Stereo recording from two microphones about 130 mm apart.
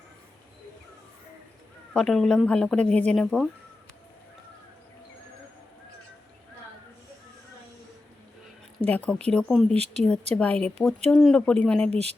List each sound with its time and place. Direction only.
1.9 s speech: 5° left (ahead or behind)
8.8 s speech: 10° left (ahead or behind)
9.7 s speech: 55° right (ahead or behind)
10.3 s speech: 10° left (ahead or behind)